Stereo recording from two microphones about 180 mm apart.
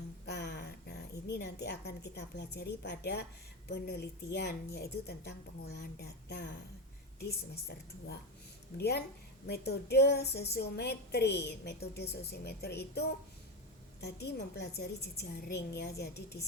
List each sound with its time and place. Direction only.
0.3 s a woman's voice: 70° left (ahead or behind)